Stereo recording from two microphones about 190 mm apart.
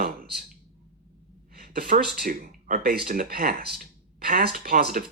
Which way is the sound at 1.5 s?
55° right (ahead or behind).